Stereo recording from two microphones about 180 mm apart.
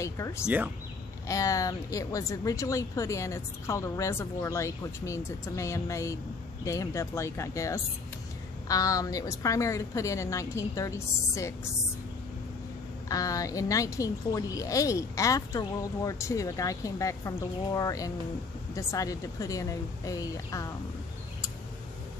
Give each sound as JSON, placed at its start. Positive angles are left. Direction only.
{"t": 0.0, "sound": "speech", "side_deg": 15}
{"t": 13.1, "sound": "speech", "side_deg": 20}